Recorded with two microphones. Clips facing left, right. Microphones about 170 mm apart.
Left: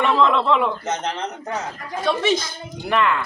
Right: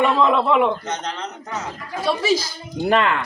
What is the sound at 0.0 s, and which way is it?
Speech, 10° right (ahead or behind).